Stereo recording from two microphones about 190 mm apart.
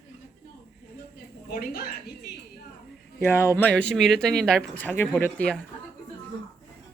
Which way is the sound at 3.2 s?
15° left (ahead or behind).